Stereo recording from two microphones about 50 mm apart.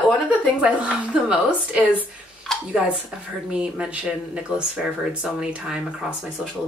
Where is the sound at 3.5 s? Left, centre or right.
Centre.